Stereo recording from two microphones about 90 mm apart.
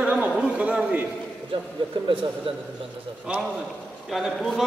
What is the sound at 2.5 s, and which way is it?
Speech, 75° right (ahead or behind).